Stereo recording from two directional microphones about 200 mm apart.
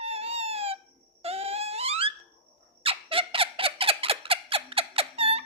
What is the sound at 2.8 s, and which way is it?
Squeak, 25° right (ahead or behind).